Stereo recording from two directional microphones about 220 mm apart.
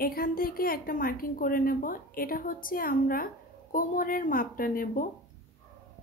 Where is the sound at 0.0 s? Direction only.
40° left (ahead or behind).